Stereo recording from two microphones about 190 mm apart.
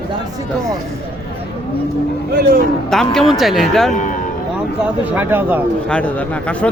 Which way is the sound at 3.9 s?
40° left (ahead or behind).